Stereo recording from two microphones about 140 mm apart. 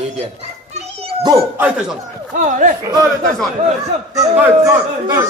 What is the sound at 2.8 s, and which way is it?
Speech, 25° right (ahead or behind).